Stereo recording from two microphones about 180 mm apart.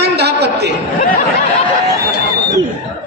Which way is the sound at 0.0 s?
65° right (ahead or behind).